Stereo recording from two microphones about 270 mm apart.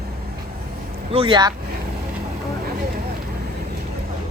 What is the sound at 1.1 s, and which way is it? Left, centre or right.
Speech, centre.